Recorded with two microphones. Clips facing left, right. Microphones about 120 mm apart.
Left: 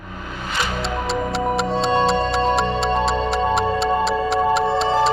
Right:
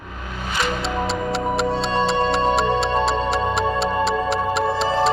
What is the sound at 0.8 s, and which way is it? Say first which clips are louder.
Music: even; centre (ahead or behind).